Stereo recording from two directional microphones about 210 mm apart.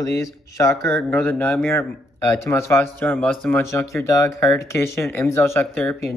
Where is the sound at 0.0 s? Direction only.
15° left (ahead or behind).